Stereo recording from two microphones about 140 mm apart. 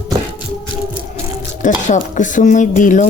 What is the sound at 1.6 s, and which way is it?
Speech, 65° left (ahead or behind).